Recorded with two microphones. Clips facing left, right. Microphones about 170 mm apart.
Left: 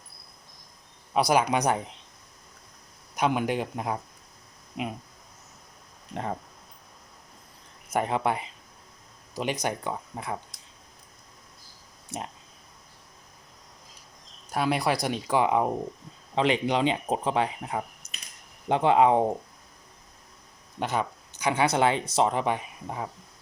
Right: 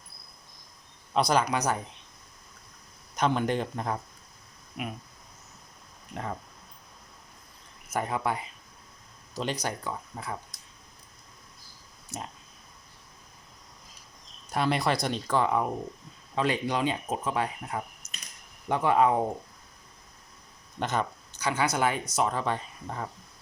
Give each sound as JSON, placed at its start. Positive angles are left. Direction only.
{"t": 1.1, "sound": "speech", "side_deg": 10}
{"t": 3.2, "sound": "speech", "side_deg": 10}
{"t": 4.8, "sound": "speech", "side_deg": 20}
{"t": 6.1, "sound": "speech", "side_deg": 30}
{"t": 7.9, "sound": "speech", "side_deg": 25}
{"t": 12.1, "sound": "speech", "side_deg": 55}
{"t": 14.5, "sound": "speech", "side_deg": 5}
{"t": 20.7, "sound": "speech", "side_deg": 10}
{"t": 21.6, "sound": "speech", "side_deg": 25}